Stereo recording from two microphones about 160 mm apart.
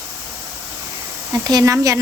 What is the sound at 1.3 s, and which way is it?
Speech, 20° right (ahead or behind).